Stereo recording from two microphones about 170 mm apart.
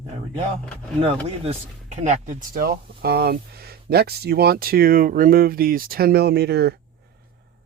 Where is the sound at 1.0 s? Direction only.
40° right (ahead or behind); by 6.7 s 70° right (ahead or behind).